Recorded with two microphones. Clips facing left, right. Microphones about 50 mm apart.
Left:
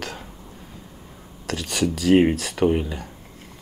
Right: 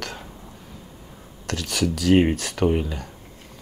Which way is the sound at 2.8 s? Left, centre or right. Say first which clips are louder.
Even; centre.